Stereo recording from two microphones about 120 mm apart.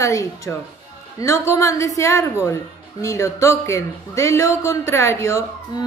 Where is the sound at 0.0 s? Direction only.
25° left (ahead or behind).